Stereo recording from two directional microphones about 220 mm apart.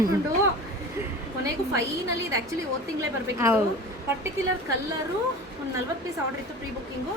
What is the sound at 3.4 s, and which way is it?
Speech, 10° right (ahead or behind).